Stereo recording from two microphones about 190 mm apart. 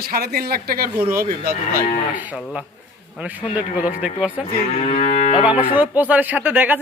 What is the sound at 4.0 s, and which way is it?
Speech, 5° right (ahead or behind).